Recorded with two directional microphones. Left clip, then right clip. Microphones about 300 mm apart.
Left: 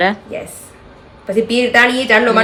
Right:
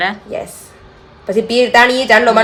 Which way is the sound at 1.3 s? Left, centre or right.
Centre.